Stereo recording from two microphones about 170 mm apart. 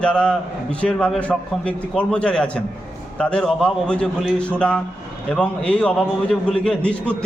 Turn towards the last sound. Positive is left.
turn(degrees=5)  # may be behind; listen again after turning